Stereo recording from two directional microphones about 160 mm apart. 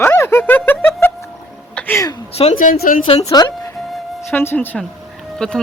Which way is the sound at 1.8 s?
10° left (ahead or behind).